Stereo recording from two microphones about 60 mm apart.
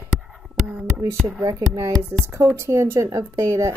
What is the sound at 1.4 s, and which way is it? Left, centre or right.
Speech, right.